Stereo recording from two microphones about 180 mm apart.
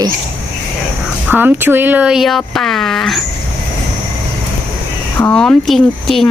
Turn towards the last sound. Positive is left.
turn(degrees=0)  # may be behind; listen again after turning